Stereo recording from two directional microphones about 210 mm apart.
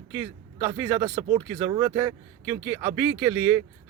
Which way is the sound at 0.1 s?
15° right (ahead or behind).